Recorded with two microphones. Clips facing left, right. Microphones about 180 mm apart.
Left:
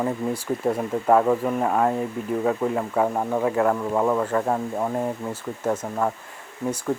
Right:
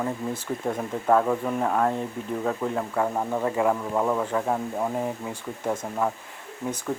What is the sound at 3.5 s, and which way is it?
Speech, centre (ahead or behind).